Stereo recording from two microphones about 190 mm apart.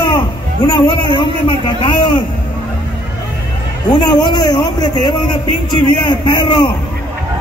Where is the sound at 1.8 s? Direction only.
25° left (ahead or behind).